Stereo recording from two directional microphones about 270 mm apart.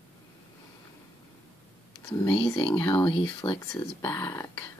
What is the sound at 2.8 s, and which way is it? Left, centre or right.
Speech, centre.